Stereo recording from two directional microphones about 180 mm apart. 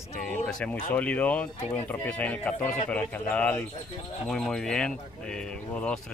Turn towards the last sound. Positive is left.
turn(degrees=5)  # may be behind; listen again after turning